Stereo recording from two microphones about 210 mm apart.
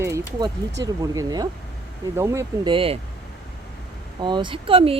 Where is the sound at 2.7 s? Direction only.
25° right (ahead or behind).